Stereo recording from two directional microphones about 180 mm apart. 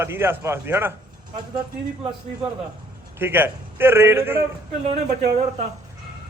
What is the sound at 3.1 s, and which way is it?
A man's voice, 10° right (ahead or behind).